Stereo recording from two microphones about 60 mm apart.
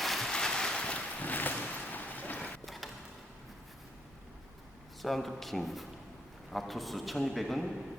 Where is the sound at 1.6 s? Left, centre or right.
Left.